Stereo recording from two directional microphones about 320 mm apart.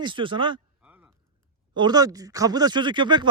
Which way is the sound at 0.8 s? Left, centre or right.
Centre.